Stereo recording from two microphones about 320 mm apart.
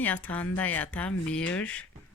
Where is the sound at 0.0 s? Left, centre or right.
Centre.